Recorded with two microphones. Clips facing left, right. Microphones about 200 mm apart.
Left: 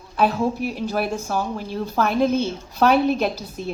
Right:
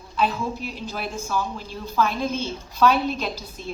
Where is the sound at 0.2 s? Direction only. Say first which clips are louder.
Left 5 dB; 60° left (ahead or behind).